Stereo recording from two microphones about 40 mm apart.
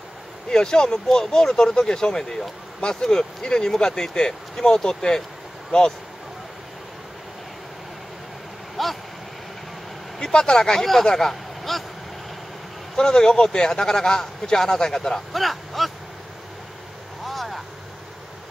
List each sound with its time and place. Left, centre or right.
0.5 s speech: centre
8.8 s vehicle: centre
10.1 s speech: centre
12.9 s speech: centre
15.3 s speech: centre
17.2 s vehicle: centre